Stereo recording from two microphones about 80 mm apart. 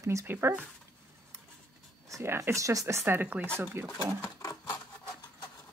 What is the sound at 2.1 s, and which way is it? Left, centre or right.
Speech, right.